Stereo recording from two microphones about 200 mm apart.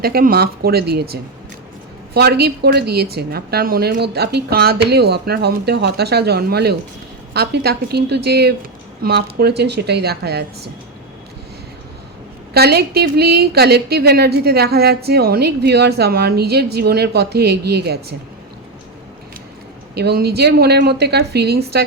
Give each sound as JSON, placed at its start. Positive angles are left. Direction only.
{"t": 0.0, "sound": "a woman's voice", "side_deg": -50}
{"t": 12.5, "sound": "a woman's voice", "side_deg": -50}
{"t": 19.9, "sound": "a woman's voice", "side_deg": -55}